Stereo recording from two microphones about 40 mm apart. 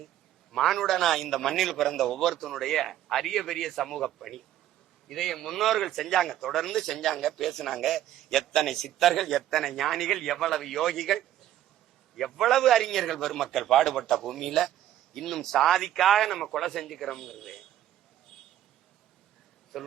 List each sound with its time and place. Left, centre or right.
0.5 s a man's voice: centre
19.7 s a man's voice: centre